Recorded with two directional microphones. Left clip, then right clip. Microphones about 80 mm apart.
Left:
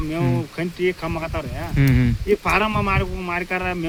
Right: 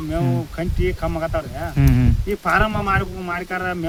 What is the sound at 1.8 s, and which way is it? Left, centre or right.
Speech, right.